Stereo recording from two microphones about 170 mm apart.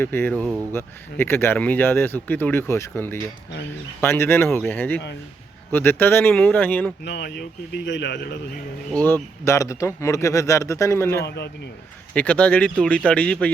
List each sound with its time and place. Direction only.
0.0 s speech: 15° left (ahead or behind)
7.0 s speech: 80° left
8.9 s speech: 10° left (ahead or behind)
11.3 s speech: 80° left
12.1 s speech: 10° left (ahead or behind)